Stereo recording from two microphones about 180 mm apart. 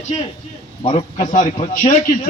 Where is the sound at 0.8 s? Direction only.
40° left (ahead or behind).